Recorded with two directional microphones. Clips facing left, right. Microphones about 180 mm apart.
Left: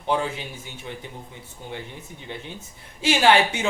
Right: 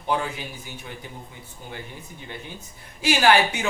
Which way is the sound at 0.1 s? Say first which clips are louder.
Left 1 dB; 25° left (ahead or behind).